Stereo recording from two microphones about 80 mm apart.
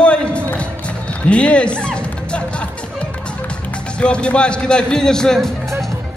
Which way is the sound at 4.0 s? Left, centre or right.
Centre.